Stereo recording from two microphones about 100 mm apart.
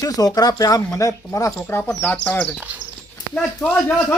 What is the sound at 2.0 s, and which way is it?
Speech, 15° left (ahead or behind).